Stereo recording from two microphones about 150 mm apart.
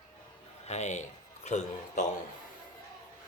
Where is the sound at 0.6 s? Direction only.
50° left (ahead or behind).